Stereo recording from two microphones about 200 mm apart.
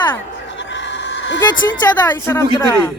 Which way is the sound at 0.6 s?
60° left (ahead or behind).